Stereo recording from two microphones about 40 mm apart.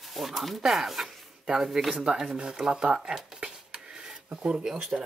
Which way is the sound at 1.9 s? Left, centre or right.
Right.